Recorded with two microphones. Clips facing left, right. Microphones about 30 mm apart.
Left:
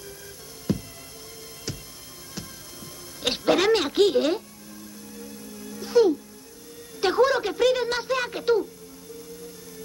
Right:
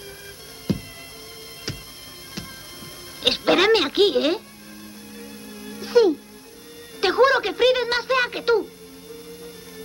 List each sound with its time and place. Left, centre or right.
0.7 s music: right
3.2 s speech: right
5.2 s music: right
7.0 s speech: right